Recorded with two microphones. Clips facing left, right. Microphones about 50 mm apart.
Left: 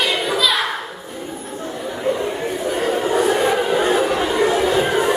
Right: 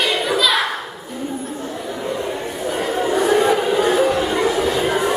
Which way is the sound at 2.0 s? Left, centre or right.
Centre.